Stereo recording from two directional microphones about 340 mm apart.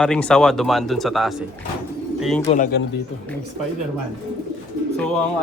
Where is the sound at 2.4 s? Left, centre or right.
Left.